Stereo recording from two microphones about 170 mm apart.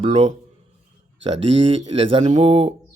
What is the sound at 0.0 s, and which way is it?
Speech, 40° right (ahead or behind).